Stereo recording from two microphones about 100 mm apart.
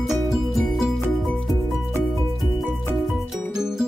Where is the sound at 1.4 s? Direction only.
35° left (ahead or behind).